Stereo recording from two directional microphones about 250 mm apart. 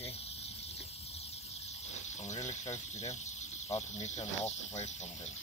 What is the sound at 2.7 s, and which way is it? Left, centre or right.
Speech, left.